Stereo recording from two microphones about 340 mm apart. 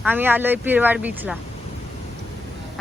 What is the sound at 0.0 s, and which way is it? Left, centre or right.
A woman's voice, centre.